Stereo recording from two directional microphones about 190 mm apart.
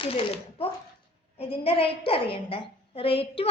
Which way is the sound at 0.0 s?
30° left (ahead or behind).